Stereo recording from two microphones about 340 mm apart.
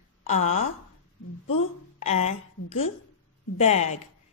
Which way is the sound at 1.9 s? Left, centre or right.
Centre.